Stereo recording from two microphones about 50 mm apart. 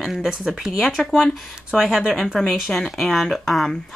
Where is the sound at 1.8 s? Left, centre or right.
Centre.